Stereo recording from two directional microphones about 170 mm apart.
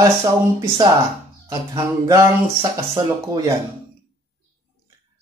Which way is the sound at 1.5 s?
20° right (ahead or behind).